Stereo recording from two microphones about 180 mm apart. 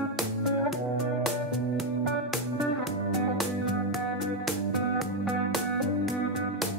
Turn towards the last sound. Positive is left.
turn(degrees=0)  # may be behind; listen again after turning